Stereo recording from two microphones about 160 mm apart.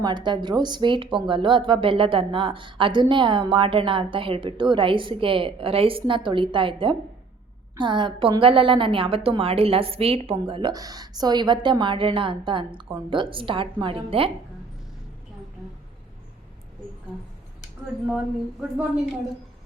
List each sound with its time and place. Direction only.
0.0 s a woman's voice: 30° right (ahead or behind)